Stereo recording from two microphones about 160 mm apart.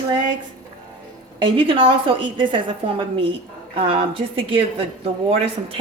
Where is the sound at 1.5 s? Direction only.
35° right (ahead or behind).